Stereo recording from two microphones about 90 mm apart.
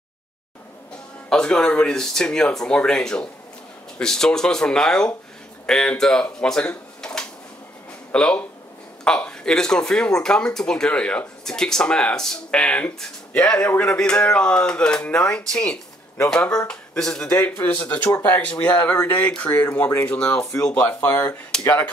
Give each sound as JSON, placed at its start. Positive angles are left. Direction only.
{"t": 1.3, "sound": "speech", "side_deg": 10}